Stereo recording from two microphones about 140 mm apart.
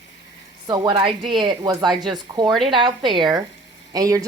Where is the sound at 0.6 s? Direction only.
30° right (ahead or behind).